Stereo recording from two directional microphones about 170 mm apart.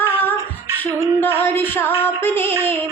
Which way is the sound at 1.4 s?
10° left (ahead or behind).